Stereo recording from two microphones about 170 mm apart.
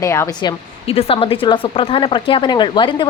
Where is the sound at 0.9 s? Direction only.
35° left (ahead or behind).